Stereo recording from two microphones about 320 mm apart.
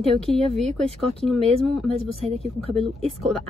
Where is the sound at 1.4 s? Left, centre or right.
Centre.